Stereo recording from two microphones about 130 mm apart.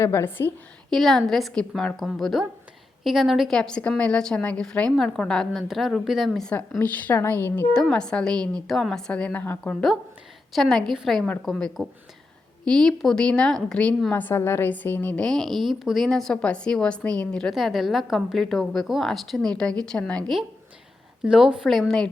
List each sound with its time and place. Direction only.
0.0 s a woman's voice: 20° left (ahead or behind)
0.9 s a woman's voice: centre (ahead or behind)
7.8 s a woman's voice: 5° left (ahead or behind)
10.5 s a woman's voice: centre (ahead or behind)